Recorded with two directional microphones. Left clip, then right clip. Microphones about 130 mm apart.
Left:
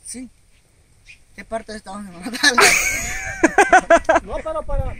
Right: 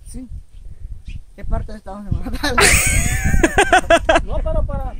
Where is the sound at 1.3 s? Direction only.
25° left (ahead or behind).